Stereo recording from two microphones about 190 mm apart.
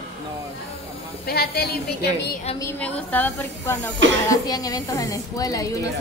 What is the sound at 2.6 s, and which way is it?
Speech, 10° left (ahead or behind).